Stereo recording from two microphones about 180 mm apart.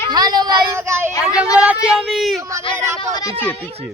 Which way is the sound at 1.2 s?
5° right (ahead or behind).